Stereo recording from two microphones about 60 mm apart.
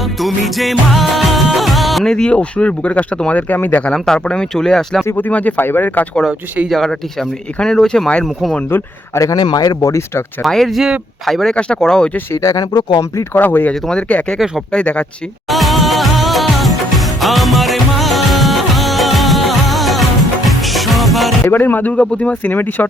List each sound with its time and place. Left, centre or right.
0.0 s music of bollywood: centre
2.0 s speech: centre; by 3.8 s left
3.9 s speech: centre
5.1 s speech: left
6.7 s speech: centre
8.7 s speech: left
9.1 s speech: left
10.4 s speech: centre
12.3 s speech: left
13.3 s speech: left
14.1 s speech: left
15.4 s music: centre
21.5 s speech: left
21.9 s speech: centre